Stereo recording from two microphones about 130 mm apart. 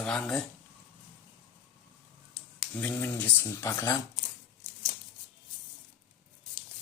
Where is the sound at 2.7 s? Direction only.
10° left (ahead or behind).